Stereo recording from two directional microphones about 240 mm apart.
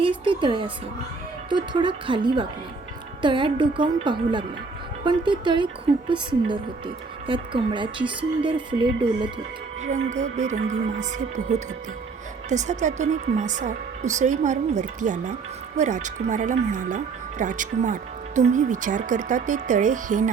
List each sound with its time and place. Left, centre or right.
0.0 s speech: right